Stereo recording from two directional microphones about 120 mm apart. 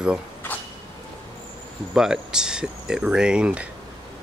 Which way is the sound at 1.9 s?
5° right (ahead or behind).